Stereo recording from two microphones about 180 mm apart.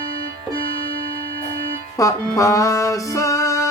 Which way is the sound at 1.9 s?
20° left (ahead or behind).